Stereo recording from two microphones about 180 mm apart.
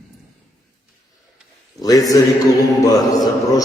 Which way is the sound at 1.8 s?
20° left (ahead or behind).